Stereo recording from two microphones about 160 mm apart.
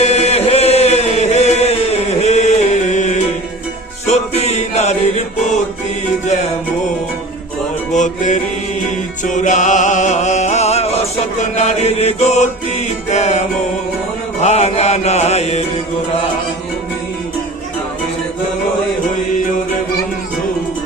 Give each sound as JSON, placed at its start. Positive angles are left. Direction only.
{"t": 0.0, "sound": "chant", "side_deg": 45}
{"t": 4.0, "sound": "music", "side_deg": 45}
{"t": 7.9, "sound": "music", "side_deg": 50}